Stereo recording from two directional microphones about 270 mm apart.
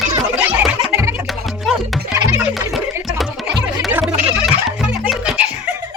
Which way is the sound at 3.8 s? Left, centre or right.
Centre.